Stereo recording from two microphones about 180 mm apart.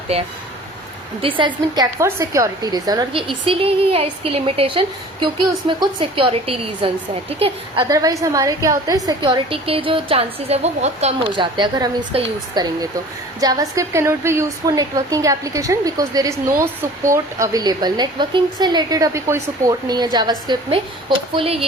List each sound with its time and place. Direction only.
0.1 s a woman's voice: 35° right (ahead or behind)
7.9 s a woman's voice: 20° right (ahead or behind); by 11.3 s 35° right (ahead or behind)
11.3 s a woman's voice: 25° right (ahead or behind)